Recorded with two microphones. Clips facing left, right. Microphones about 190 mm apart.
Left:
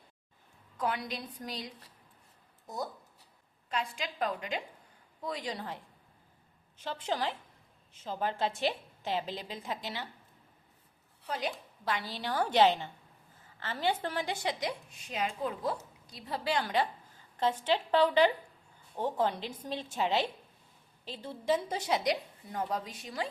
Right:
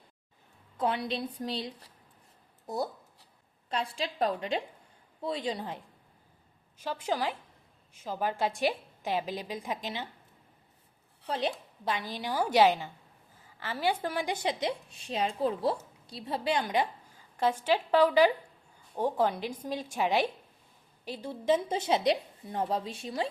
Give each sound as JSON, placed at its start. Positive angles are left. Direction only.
{"t": 0.8, "sound": "a woman's voice", "side_deg": -25}
{"t": 11.3, "sound": "a woman's voice", "side_deg": -30}